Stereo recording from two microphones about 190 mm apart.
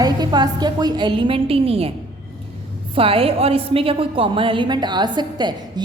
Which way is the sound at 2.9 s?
30° right (ahead or behind).